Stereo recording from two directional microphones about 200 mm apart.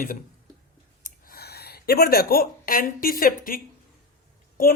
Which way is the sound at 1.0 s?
50° left (ahead or behind).